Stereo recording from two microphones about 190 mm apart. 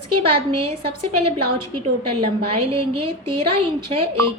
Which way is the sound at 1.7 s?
30° right (ahead or behind).